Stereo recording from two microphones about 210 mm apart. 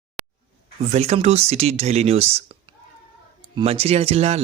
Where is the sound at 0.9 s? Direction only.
30° right (ahead or behind).